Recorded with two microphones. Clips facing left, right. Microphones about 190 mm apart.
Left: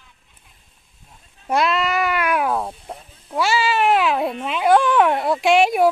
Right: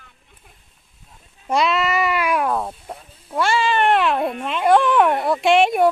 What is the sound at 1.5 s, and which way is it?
Speech, centre (ahead or behind).